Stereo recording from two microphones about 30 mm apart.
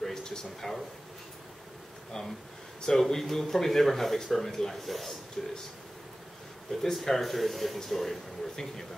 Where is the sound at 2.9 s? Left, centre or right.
Centre.